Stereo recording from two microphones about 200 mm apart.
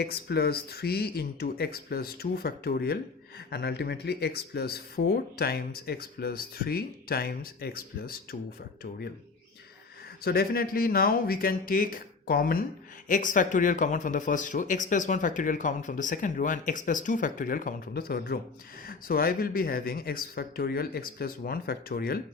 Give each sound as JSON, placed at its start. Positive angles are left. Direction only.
{"t": 0.0, "sound": "speech", "side_deg": 55}
{"t": 10.2, "sound": "speech", "side_deg": 50}